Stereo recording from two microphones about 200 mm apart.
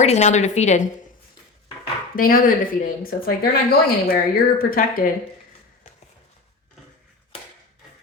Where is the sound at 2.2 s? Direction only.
45° left (ahead or behind).